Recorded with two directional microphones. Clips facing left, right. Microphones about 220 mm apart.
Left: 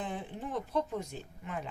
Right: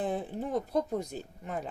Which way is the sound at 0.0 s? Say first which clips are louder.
Right 6 dB; 40° right (ahead or behind).